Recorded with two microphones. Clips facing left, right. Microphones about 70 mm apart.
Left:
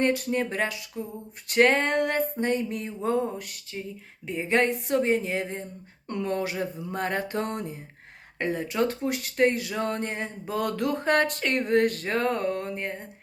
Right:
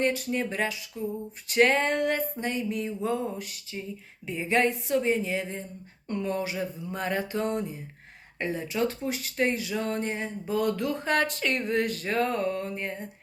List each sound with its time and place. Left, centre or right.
0.0 s speech: left
6.1 s speech: left